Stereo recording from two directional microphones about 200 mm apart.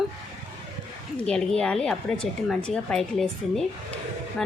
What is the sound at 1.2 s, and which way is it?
Speech, 5° left (ahead or behind).